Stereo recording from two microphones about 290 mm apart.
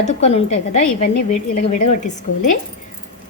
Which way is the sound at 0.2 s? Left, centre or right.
Left.